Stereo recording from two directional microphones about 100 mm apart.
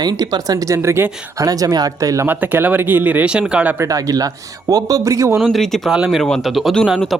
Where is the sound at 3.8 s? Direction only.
35° right (ahead or behind).